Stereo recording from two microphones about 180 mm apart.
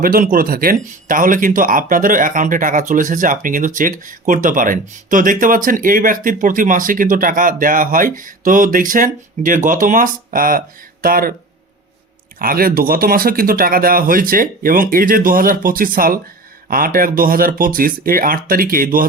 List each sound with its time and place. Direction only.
0.0 s speech: 50° right (ahead or behind)
12.4 s speech: 55° right (ahead or behind)